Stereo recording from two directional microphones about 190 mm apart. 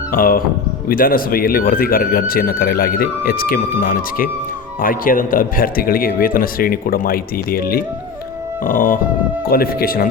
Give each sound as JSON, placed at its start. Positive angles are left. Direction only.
{"t": 0.1, "sound": "speech", "side_deg": 50}